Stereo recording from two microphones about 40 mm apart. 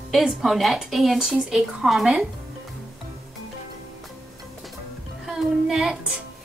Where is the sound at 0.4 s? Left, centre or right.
Centre.